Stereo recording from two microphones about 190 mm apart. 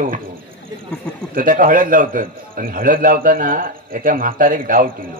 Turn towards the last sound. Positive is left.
turn(degrees=-45)  # may be behind; listen again after turning